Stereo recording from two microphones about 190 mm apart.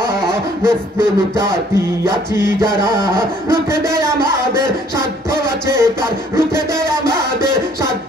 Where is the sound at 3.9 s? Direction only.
15° right (ahead or behind).